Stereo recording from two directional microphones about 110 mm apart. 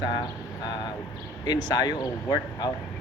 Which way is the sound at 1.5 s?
35° left (ahead or behind).